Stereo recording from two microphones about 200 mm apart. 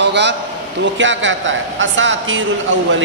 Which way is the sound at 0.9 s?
65° right (ahead or behind).